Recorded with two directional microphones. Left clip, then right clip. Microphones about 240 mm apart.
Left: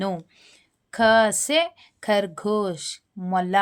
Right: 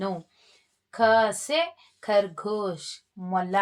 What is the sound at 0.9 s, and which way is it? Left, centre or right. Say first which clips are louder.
Speech: left 3 dB; left.